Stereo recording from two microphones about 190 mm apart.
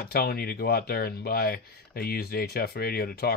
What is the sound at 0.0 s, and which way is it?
Speech, 55° left (ahead or behind).